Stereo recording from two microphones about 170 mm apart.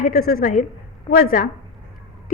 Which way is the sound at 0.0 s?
60° left (ahead or behind).